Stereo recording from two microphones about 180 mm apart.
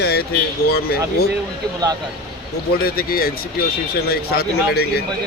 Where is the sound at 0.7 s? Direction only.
60° left (ahead or behind).